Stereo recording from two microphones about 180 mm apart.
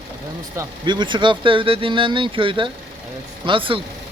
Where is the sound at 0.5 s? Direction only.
20° right (ahead or behind).